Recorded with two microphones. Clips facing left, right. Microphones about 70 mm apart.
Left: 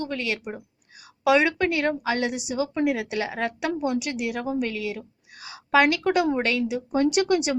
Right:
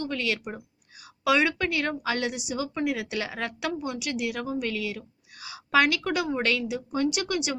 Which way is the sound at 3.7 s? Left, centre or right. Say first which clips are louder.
Left 5 dB; left.